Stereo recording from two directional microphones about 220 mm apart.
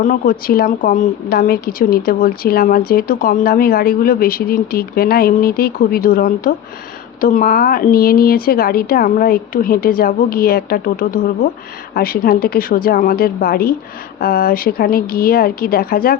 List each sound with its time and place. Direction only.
0.0 s a woman's voice: 40° left (ahead or behind)